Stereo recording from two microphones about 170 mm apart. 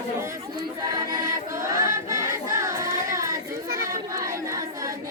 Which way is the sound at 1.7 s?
20° right (ahead or behind).